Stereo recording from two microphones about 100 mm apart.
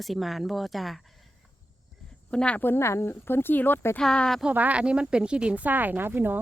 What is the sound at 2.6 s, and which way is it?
Speech, 25° left (ahead or behind).